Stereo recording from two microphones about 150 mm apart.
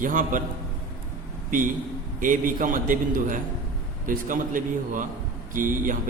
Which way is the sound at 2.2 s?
65° right (ahead or behind).